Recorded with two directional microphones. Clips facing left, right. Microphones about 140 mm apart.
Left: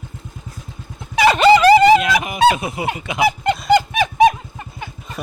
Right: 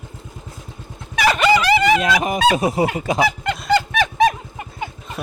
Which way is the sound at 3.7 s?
15° left (ahead or behind).